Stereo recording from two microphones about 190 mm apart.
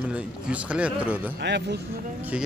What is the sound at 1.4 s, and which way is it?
Speech, 65° right (ahead or behind).